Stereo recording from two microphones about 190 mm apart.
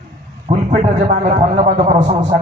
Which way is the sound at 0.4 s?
35° right (ahead or behind).